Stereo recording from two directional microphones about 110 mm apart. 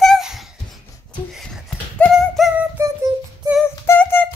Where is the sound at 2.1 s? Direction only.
Centre (ahead or behind).